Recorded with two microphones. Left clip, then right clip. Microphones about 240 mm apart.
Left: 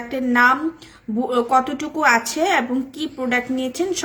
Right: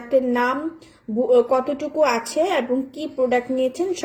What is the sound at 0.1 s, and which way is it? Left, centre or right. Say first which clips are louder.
Speech: left 3 dB; centre.